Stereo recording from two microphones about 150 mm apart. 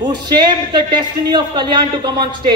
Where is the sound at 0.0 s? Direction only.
30° right (ahead or behind).